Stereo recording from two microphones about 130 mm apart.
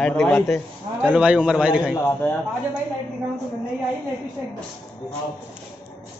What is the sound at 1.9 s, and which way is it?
Speech, 20° left (ahead or behind).